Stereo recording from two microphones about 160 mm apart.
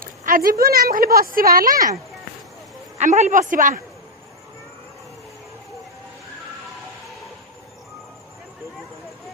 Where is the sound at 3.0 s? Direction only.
50° right (ahead or behind).